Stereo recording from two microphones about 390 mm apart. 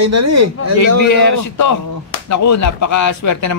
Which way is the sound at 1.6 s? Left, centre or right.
Left.